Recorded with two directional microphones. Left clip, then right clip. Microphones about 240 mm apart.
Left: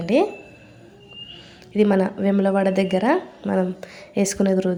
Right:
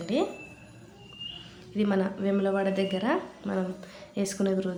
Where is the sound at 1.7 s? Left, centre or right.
Left.